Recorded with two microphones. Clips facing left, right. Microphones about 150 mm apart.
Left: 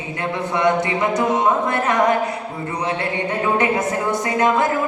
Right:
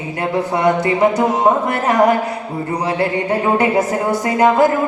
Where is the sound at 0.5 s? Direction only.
30° right (ahead or behind).